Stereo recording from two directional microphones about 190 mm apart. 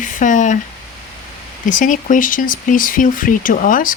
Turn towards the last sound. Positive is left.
turn(degrees=45)  # may be behind; listen again after turning